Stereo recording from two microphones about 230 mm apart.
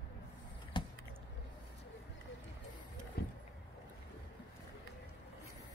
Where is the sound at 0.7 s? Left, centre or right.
Left.